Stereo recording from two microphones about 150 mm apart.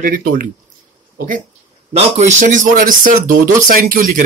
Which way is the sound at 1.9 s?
50° right (ahead or behind).